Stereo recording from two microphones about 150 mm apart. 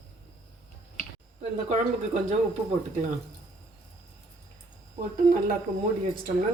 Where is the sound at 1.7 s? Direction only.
50° right (ahead or behind).